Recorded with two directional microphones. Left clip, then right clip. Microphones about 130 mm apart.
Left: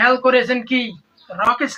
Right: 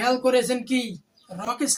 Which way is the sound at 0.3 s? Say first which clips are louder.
Left 6 dB; 40° right (ahead or behind).